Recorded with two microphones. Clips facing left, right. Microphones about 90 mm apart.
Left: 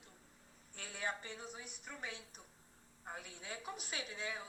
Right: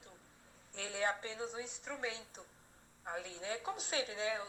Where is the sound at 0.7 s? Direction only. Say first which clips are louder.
Right 6 dB; 75° right (ahead or behind).